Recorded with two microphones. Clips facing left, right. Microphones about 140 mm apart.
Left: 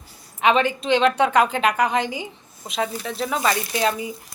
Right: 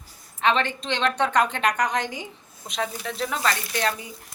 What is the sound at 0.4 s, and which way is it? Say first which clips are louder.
A woman's voice: left 4 dB; 10° left (ahead or behind).